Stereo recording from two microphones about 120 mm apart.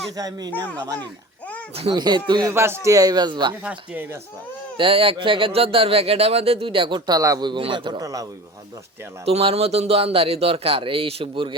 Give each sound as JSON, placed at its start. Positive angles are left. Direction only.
{"t": 0.2, "sound": "speech", "side_deg": -35}
{"t": 1.9, "sound": "speech", "side_deg": -40}
{"t": 2.5, "sound": "speech", "side_deg": -20}
{"t": 3.6, "sound": "speech", "side_deg": -10}
{"t": 4.8, "sound": "speech", "side_deg": -50}
{"t": 7.2, "sound": "a man's voice", "side_deg": -25}
{"t": 7.5, "sound": "speech", "side_deg": -40}
{"t": 8.0, "sound": "a man's voice", "side_deg": -30}
{"t": 9.2, "sound": "speech", "side_deg": -55}